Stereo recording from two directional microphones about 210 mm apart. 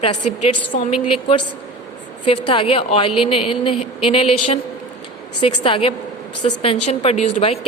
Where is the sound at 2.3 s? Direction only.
25° left (ahead or behind).